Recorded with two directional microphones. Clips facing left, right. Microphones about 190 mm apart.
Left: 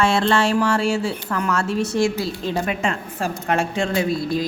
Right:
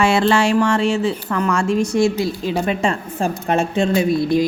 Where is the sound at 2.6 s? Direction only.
30° right (ahead or behind).